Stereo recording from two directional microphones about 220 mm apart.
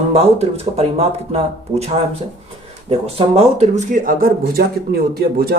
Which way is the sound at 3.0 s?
25° right (ahead or behind).